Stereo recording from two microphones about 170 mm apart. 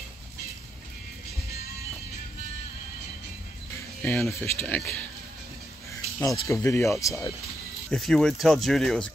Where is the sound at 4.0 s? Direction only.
5° left (ahead or behind).